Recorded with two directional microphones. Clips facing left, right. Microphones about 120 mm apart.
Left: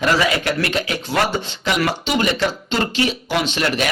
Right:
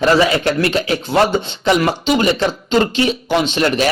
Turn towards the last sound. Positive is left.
turn(degrees=-30)  # may be behind; listen again after turning